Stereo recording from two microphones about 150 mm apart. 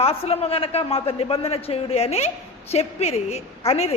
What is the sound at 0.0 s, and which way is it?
A man's voice, 40° left (ahead or behind).